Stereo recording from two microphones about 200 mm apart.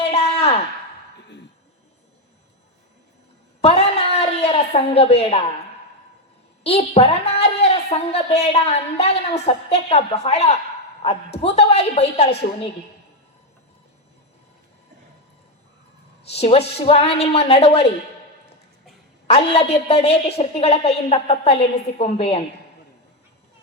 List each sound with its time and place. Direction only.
0.1 s a sound: 30° left (ahead or behind)
3.6 s a sound: 30° left (ahead or behind)
4.4 s a woman's voice: 30° left (ahead or behind)
6.6 s a woman's voice: 30° left (ahead or behind)
16.3 s a woman's voice: 30° left (ahead or behind)
19.3 s a woman's voice: 30° left (ahead or behind)